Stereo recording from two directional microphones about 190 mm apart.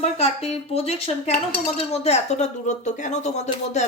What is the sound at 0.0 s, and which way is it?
Speech, 35° left (ahead or behind).